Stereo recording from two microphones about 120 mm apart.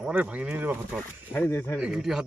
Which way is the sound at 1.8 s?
5° right (ahead or behind).